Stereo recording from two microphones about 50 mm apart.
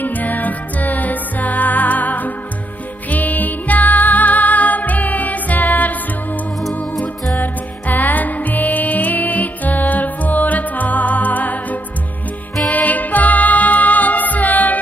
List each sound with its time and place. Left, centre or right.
0.0 s music: left